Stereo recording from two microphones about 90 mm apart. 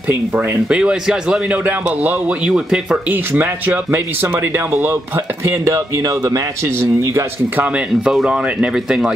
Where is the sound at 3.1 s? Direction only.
20° right (ahead or behind); by 6.7 s 40° right (ahead or behind).